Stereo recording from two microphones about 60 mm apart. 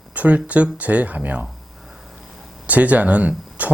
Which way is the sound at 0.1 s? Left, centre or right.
Right.